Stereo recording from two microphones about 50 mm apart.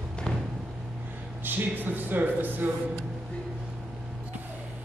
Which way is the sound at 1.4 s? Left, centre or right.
Right.